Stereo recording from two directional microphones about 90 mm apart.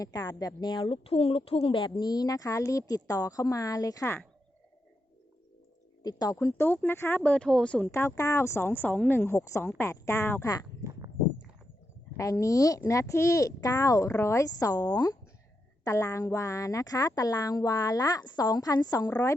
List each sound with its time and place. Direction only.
0.3 s a woman's voice: 50° left (ahead or behind)
0.9 s a woman's voice: 90° left
1.9 s speech: 45° left (ahead or behind)
6.0 s speech: 45° left (ahead or behind)
6.3 s speech: 25° left (ahead or behind)
7.2 s speech: 10° left (ahead or behind)
7.9 s speech: 30° left (ahead or behind)
10.8 s walk: 30° right (ahead or behind)
12.1 s speech: 35° left (ahead or behind)
15.8 s a woman's voice: 35° left (ahead or behind)